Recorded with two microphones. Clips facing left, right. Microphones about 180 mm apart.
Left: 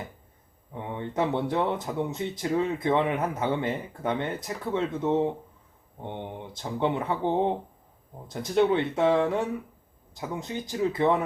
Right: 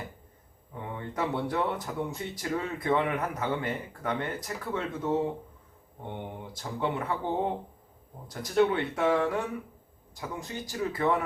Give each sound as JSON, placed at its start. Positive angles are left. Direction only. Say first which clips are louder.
{"t": 0.7, "sound": "speech", "louder": "left 4 dB", "side_deg": 25}